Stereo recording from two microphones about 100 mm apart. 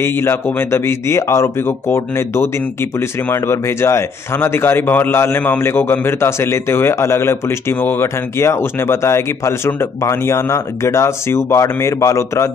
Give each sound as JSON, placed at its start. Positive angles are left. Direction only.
{"t": 0.0, "sound": "speech", "side_deg": 25}